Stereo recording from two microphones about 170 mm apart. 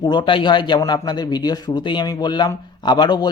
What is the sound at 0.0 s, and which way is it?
Speech, 25° left (ahead or behind).